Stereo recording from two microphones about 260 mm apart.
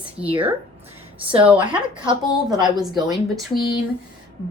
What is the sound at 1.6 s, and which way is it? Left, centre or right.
A woman's voice, centre.